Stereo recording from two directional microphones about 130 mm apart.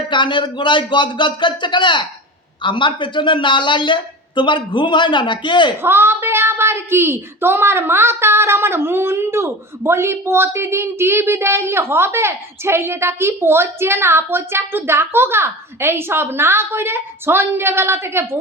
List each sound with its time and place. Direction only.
0.1 s speech: 40° left (ahead or behind)
5.8 s speech: 20° right (ahead or behind)